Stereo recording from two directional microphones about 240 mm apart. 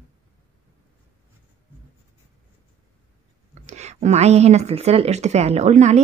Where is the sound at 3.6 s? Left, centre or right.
Right.